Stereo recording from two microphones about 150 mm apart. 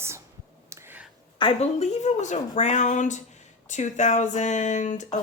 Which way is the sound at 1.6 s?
50° left (ahead or behind).